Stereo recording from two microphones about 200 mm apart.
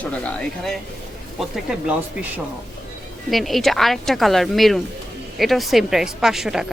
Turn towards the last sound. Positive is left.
turn(degrees=0)  # may be behind; listen again after turning